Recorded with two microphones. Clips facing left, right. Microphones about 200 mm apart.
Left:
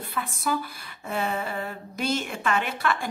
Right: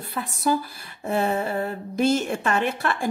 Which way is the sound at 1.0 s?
45° right (ahead or behind).